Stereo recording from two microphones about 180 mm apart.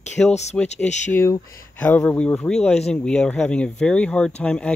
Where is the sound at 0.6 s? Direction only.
40° left (ahead or behind).